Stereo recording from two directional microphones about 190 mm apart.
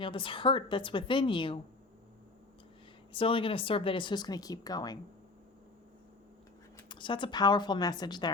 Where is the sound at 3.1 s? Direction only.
30° left (ahead or behind).